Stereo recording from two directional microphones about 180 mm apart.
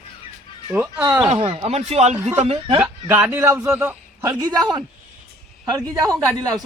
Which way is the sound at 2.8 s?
10° right (ahead or behind).